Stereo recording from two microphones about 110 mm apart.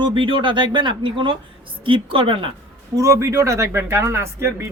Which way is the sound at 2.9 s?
30° right (ahead or behind).